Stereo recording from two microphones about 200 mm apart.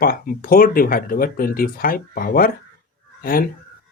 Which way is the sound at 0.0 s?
45° left (ahead or behind).